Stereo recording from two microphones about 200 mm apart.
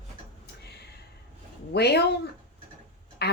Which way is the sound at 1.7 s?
55° left (ahead or behind).